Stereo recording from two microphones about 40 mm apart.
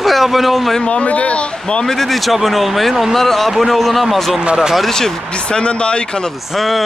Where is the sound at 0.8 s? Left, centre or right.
Left.